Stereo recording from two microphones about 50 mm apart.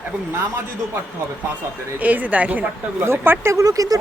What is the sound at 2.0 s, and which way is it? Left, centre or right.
Speech, right.